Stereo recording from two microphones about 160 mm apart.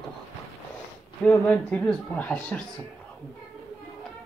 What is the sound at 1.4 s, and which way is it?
Speech, centre (ahead or behind).